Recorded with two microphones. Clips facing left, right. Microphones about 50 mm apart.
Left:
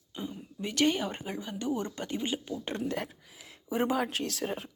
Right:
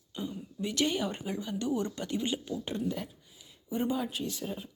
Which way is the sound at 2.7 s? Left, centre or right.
Left.